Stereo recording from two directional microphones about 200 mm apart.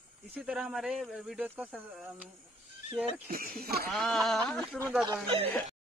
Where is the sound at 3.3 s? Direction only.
50° right (ahead or behind).